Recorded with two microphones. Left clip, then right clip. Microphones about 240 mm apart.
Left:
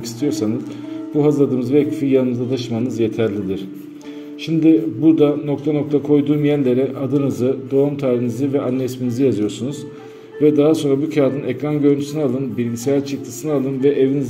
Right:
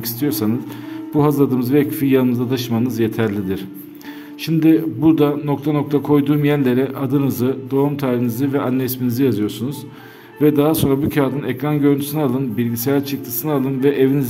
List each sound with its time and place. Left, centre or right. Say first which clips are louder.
0.2 s a man's voice: even; right